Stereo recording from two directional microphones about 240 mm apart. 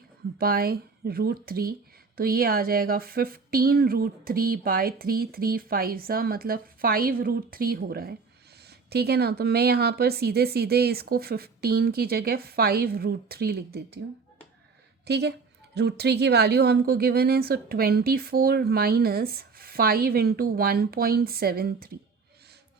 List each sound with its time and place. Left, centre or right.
0.3 s a woman's voice: right
15.0 s a woman's voice: right